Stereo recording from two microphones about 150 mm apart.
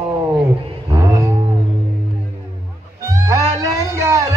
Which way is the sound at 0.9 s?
20° right (ahead or behind).